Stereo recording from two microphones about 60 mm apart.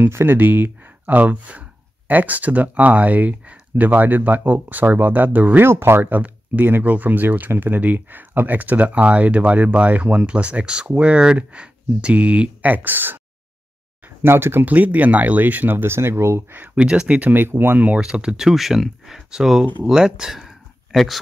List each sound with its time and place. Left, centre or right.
0.0 s speech: right
5.7 s speech: right
5.9 s speech: right
14.6 s speech: right
16.7 s speech: centre
17.3 s speech: right
17.7 s speech: right; by 21.2 s centre